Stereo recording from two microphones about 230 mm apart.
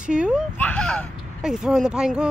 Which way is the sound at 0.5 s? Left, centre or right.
Centre.